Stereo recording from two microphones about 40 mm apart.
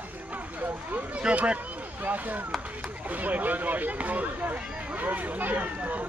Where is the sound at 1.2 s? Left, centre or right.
Right.